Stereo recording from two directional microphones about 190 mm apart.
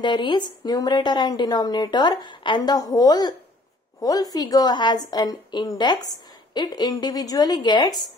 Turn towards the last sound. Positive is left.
turn(degrees=25)  # may be behind; listen again after turning